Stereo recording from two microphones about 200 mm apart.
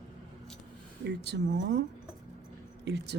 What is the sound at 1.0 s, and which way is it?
Speech, 55° right (ahead or behind).